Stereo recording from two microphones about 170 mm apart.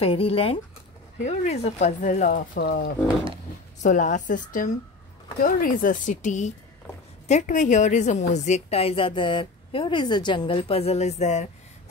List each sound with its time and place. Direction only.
0.0 s a woman's voice: 35° left (ahead or behind); by 2.9 s 60° left (ahead or behind)
3.8 s a woman's voice: 45° left (ahead or behind)